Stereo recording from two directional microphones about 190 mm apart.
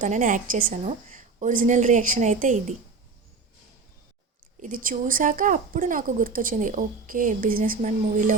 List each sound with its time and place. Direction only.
0.0 s a woman's voice: 40° right (ahead or behind)
4.6 s a woman's voice: 45° right (ahead or behind)